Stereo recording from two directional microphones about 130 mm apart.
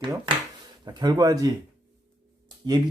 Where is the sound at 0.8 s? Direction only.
30° right (ahead or behind).